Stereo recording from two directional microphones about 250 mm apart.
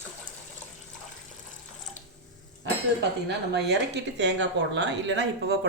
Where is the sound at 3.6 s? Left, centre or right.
Right.